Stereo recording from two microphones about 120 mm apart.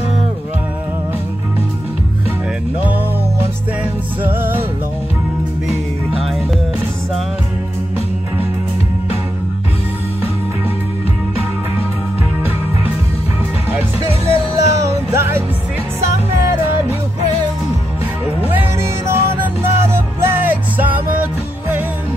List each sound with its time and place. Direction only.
4.2 s music: 15° right (ahead or behind)
13.7 s music: 20° right (ahead or behind)
18.5 s music: 15° right (ahead or behind)